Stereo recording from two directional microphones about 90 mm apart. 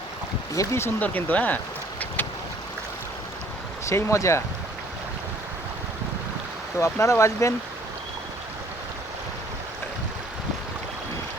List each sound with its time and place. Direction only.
0.5 s speech: 35° left (ahead or behind)
0.9 s speech: 20° left (ahead or behind)
3.8 s speech: 30° left (ahead or behind)
6.7 s speech: 35° left (ahead or behind)